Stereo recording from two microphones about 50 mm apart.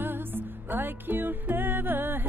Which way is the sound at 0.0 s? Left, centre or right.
Right.